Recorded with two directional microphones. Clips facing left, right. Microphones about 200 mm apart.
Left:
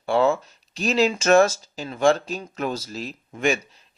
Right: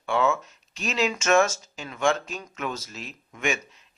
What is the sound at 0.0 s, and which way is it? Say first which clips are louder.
Speech: left 4 dB; 35° left (ahead or behind).